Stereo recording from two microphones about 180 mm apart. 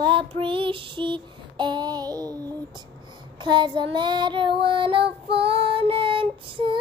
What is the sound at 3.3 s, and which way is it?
Child singing, 25° right (ahead or behind).